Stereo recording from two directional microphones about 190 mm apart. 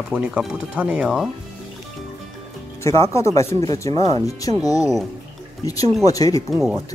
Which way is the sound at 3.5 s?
15° left (ahead or behind).